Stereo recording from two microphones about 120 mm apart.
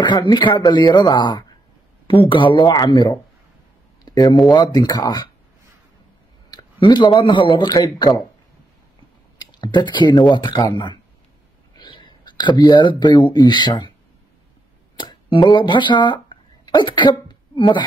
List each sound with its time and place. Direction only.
0.0 s speech: 40° left (ahead or behind)
4.0 s a sound: 35° left (ahead or behind)
4.5 s speech: 35° left (ahead or behind)
6.5 s speech: 40° left (ahead or behind)
9.4 s speech: 35° left (ahead or behind)
15.0 s speech: 40° left (ahead or behind)